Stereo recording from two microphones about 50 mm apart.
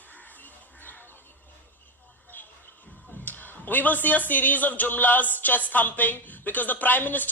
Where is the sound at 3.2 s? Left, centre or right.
Left.